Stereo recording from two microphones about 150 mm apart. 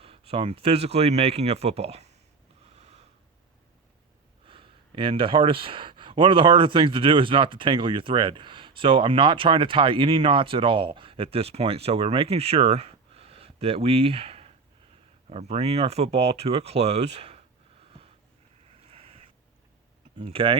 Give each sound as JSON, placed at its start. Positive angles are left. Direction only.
{"t": 0.0, "sound": "speech", "side_deg": -40}
{"t": 2.6, "sound": "snort", "side_deg": -45}
{"t": 4.4, "sound": "speech", "side_deg": -35}
{"t": 18.9, "sound": "a sound", "side_deg": -40}
{"t": 20.1, "sound": "speech", "side_deg": -35}